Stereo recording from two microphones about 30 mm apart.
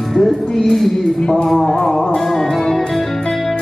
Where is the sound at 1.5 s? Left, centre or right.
Left.